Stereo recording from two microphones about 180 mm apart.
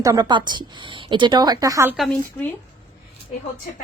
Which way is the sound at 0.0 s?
20° right (ahead or behind).